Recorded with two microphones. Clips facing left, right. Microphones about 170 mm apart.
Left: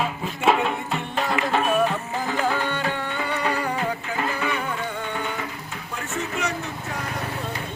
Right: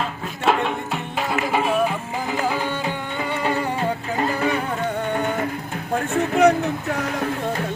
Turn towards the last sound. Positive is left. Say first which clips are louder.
# right 11 dB
turn(degrees=-60)  # may be behind; listen again after turning